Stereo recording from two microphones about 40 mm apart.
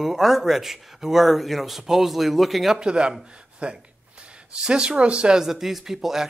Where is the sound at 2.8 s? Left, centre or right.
Right.